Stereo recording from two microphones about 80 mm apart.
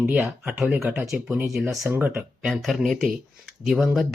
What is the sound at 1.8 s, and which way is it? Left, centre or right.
Speech, right.